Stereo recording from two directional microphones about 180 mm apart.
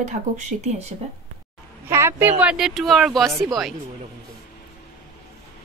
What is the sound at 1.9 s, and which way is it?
Speech, 15° right (ahead or behind).